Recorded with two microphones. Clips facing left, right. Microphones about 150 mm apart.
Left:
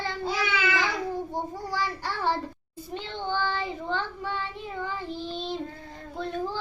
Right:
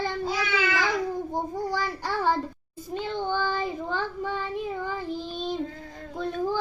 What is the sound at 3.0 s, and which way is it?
A child's voice, 45° right (ahead or behind).